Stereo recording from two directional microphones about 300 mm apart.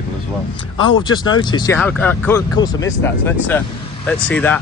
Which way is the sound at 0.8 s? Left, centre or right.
Centre.